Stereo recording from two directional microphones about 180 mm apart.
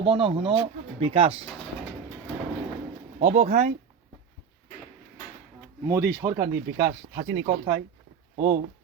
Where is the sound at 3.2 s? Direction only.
40° right (ahead or behind).